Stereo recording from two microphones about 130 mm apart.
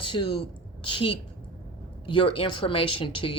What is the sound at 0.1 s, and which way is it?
Speech, 35° left (ahead or behind).